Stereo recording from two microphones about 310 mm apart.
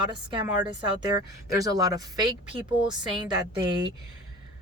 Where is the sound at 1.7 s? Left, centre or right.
Centre.